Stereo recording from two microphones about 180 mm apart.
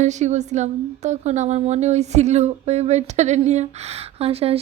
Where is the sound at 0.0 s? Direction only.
40° right (ahead or behind).